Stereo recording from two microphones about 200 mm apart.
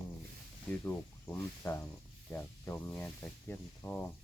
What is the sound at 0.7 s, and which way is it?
Speech, 10° left (ahead or behind).